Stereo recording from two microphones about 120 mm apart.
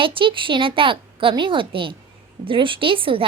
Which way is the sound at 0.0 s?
45° right (ahead or behind).